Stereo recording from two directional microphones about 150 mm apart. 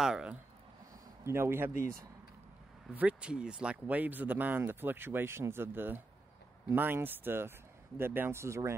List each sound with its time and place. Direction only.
0.0 s speech: 5° right (ahead or behind)
1.2 s speech: 15° right (ahead or behind)
2.9 s speech: 10° right (ahead or behind)